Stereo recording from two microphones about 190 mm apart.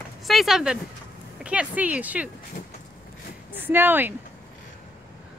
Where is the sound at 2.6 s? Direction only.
45° left (ahead or behind).